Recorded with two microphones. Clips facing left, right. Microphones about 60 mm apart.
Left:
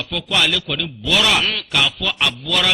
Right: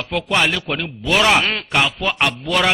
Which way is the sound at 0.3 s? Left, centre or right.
Right.